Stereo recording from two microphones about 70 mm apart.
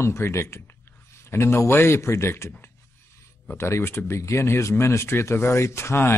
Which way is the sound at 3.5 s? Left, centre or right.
Left.